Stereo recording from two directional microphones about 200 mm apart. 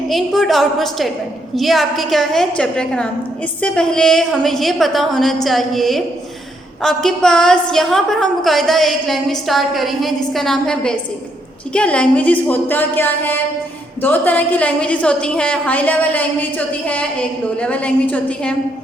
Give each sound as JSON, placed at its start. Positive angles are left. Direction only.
{"t": 0.1, "sound": "a woman's voice", "side_deg": 0}